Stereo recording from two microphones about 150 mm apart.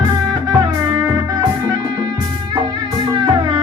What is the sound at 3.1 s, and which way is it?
Music, 35° right (ahead or behind).